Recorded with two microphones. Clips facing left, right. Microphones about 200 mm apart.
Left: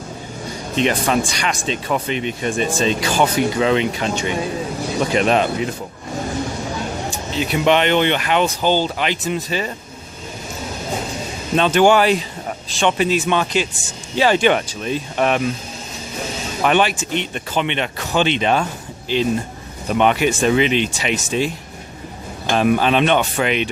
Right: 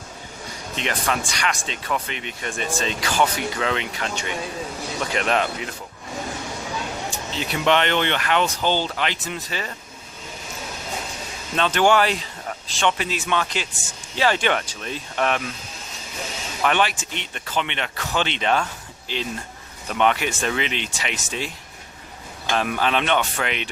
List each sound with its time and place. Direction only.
0.8 s speech: 25° left (ahead or behind)
7.1 s speech: 15° left (ahead or behind)
11.5 s speech: 15° left (ahead or behind)
16.6 s speech: 15° left (ahead or behind)
22.5 s speech: 20° left (ahead or behind)